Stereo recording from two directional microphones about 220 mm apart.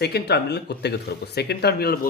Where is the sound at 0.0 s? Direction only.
50° left (ahead or behind).